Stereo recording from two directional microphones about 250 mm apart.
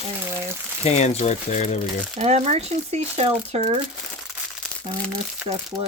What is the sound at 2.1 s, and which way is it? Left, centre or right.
Speech, right.